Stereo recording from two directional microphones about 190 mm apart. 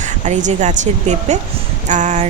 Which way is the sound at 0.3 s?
40° right (ahead or behind).